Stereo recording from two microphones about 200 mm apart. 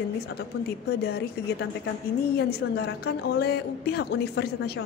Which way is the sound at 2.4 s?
55° left (ahead or behind).